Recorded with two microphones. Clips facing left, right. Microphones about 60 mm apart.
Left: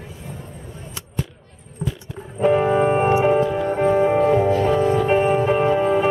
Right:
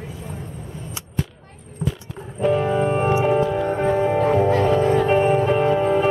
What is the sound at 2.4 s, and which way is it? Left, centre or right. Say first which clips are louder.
Music: left 3 dB; left.